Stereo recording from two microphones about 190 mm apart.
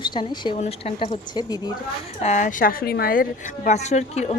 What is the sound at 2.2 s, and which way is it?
A woman's voice, 40° left (ahead or behind).